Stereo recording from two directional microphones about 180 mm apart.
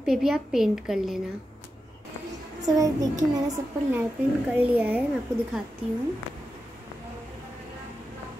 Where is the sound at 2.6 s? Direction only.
20° right (ahead or behind).